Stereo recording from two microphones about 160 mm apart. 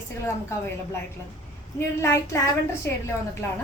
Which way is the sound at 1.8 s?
15° left (ahead or behind).